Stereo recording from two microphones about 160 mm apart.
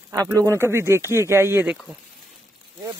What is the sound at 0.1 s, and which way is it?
Mantra, 20° right (ahead or behind).